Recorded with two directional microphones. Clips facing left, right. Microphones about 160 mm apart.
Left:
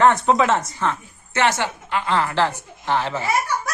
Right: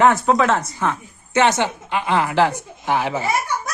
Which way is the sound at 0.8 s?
15° right (ahead or behind).